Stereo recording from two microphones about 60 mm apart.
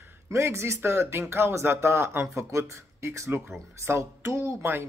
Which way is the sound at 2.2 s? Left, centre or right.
Right.